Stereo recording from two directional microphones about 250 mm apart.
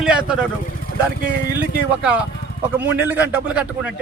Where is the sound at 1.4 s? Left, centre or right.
Right.